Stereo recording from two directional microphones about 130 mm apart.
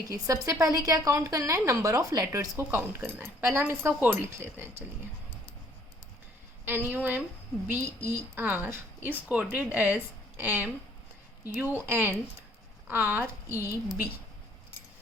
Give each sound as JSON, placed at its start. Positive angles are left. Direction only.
{"t": 0.1, "sound": "a woman's voice", "side_deg": -25}
{"t": 6.7, "sound": "a woman's voice", "side_deg": -15}